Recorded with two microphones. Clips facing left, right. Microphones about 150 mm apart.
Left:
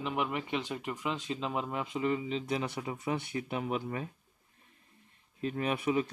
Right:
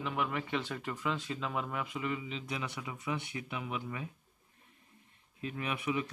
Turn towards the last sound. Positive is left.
turn(degrees=35)  # may be behind; listen again after turning